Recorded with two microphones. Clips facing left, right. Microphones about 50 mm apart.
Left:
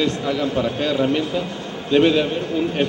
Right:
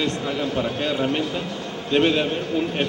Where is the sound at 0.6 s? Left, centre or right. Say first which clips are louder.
Left 3 dB; centre.